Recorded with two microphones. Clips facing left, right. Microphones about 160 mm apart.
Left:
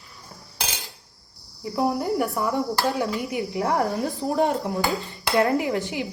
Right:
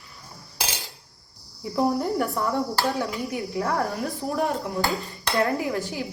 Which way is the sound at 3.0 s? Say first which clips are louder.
Left 2 dB; 20° left (ahead or behind).